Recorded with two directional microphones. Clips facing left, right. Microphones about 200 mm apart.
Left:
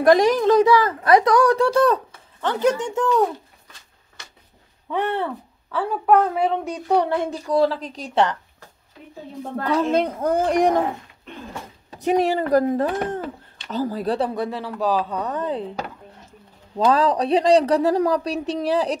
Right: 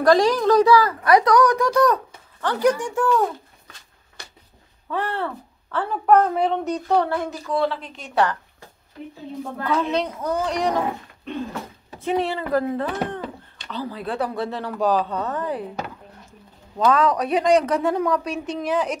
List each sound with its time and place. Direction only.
0.0 s speech: 20° left (ahead or behind)
4.8 s speech: 20° left (ahead or behind)
5.7 s a woman's voice: centre (ahead or behind)
6.9 s speech: 15° left (ahead or behind)
7.2 s speech: 40° left (ahead or behind)
8.1 s speech: 25° left (ahead or behind)
9.6 s a child's voice: 40° left (ahead or behind)
11.9 s a child's voice: 40° left (ahead or behind)
14.3 s speech: 15° left (ahead or behind)
14.6 s speech: 5° left (ahead or behind); by 15.7 s 20° left (ahead or behind)
16.7 s speech: 30° left (ahead or behind)